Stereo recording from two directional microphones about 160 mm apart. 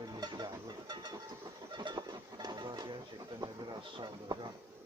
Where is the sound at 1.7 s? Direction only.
30° right (ahead or behind).